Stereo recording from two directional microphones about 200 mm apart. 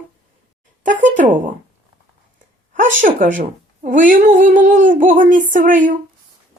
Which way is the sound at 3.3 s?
40° right (ahead or behind).